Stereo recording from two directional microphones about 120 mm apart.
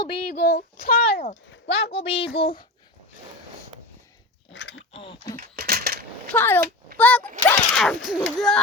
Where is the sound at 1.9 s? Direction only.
50° left (ahead or behind).